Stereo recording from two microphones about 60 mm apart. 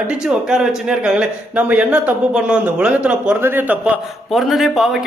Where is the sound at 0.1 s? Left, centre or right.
Centre.